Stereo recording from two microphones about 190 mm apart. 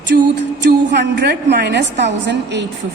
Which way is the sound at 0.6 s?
65° right (ahead or behind).